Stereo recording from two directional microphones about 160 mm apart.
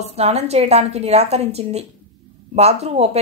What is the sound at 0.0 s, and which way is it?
A woman's voice, 40° right (ahead or behind).